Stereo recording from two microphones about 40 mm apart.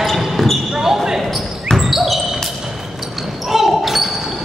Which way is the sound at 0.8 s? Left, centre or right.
Centre.